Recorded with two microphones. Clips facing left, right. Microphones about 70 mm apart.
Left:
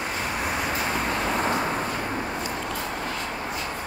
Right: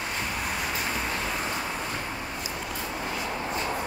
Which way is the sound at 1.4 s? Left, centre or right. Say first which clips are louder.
Left 6 dB; left.